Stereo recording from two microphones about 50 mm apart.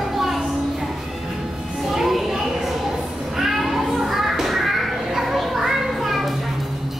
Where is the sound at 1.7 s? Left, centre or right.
Centre.